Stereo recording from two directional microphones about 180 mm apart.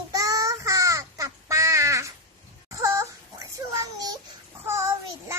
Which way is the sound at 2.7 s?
15° right (ahead or behind).